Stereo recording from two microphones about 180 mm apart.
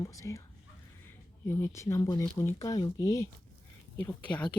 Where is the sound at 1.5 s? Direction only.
15° left (ahead or behind).